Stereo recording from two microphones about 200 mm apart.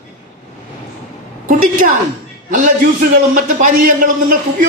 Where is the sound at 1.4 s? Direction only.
45° right (ahead or behind).